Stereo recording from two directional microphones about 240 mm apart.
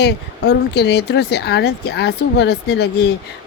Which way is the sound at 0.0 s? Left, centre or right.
Left.